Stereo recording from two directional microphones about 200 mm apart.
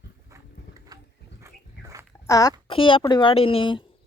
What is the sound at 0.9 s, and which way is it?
Dog, 20° right (ahead or behind).